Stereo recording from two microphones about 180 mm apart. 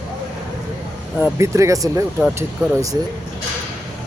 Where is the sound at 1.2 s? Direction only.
10° right (ahead or behind).